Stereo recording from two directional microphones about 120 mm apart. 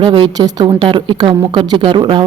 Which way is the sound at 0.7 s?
45° right (ahead or behind).